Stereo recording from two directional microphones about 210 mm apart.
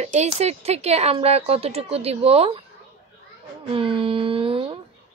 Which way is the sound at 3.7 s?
25° right (ahead or behind).